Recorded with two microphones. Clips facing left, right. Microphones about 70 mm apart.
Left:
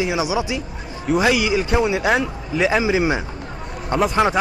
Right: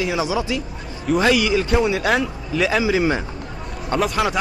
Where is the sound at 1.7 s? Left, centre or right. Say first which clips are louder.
Left 1 dB; centre.